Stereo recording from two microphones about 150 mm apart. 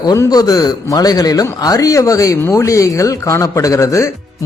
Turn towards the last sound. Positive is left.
turn(degrees=20)  # may be behind; listen again after turning